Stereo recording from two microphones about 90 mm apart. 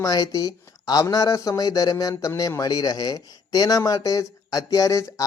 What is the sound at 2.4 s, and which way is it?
Speech, 40° left (ahead or behind).